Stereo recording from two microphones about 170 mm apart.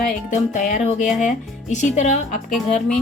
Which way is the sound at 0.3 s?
45° left (ahead or behind).